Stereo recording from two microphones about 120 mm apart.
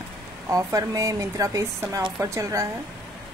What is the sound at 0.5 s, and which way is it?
Speech, 25° right (ahead or behind).